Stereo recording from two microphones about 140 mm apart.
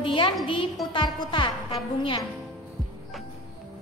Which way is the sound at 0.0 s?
35° left (ahead or behind).